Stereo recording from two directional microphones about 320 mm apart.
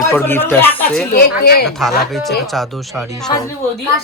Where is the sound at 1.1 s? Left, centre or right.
Left.